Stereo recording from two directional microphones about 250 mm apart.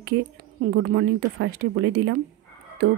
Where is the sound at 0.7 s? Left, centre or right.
Right.